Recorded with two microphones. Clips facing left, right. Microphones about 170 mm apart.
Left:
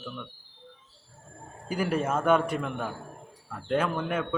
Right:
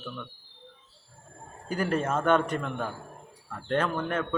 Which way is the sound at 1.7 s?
10° left (ahead or behind).